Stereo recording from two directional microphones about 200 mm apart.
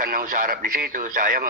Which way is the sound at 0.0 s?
45° right (ahead or behind).